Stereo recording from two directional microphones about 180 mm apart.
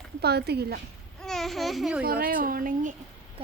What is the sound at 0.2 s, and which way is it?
Speech, 65° right (ahead or behind).